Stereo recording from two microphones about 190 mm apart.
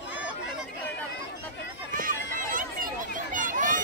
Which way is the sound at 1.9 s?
45° right (ahead or behind).